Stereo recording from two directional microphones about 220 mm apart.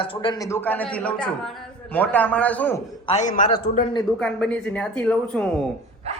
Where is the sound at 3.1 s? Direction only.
35° left (ahead or behind).